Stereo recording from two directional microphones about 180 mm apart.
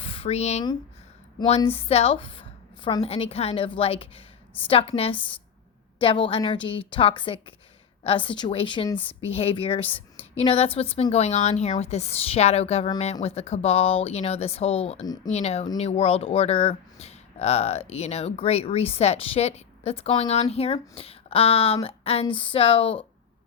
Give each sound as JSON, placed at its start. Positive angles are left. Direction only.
{"t": 0.0, "sound": "a sound", "side_deg": 30}
{"t": 1.5, "sound": "a woman's voice", "side_deg": 35}
{"t": 15.0, "sound": "a woman's voice", "side_deg": 20}
{"t": 15.3, "sound": "speech", "side_deg": 35}